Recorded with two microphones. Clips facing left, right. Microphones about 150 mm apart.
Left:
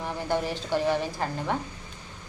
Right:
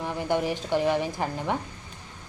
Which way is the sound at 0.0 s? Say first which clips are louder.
Right 2 dB; 15° right (ahead or behind).